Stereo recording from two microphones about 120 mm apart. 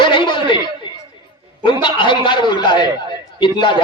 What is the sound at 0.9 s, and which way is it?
Chatter, 40° left (ahead or behind).